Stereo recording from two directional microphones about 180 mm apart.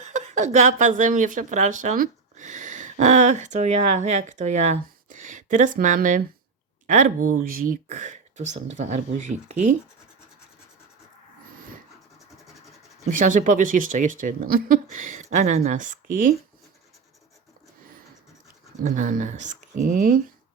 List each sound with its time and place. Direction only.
0.0 s speech: 40° right (ahead or behind)
13.1 s speech: 45° right (ahead or behind)
18.8 s speech: 45° right (ahead or behind)